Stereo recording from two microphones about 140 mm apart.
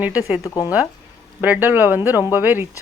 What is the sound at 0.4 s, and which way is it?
Speech, 25° left (ahead or behind).